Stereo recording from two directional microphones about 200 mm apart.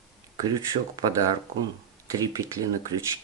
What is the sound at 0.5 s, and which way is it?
Speech, 20° right (ahead or behind).